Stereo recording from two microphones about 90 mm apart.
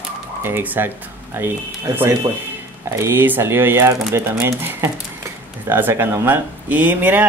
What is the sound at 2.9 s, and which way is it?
Speech, 25° right (ahead or behind).